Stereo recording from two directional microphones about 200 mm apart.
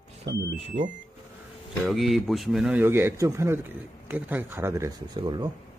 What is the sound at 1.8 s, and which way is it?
A man's voice, centre (ahead or behind).